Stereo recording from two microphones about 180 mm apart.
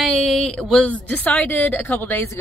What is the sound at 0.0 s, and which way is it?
Speech, centre (ahead or behind).